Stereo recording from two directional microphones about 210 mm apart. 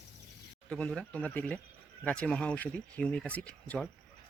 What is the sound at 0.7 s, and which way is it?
Speech, 5° left (ahead or behind).